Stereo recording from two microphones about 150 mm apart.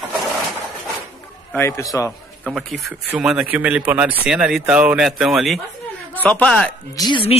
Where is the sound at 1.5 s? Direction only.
20° left (ahead or behind).